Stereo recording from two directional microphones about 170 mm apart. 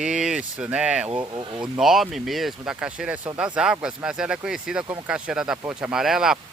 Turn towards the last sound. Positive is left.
turn(degrees=-5)  # may be behind; listen again after turning